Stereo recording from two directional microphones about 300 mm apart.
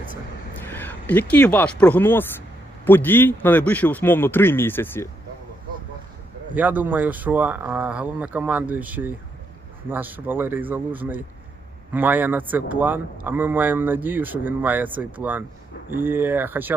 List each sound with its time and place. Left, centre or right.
0.6 s a man's voice: centre
6.5 s speech: centre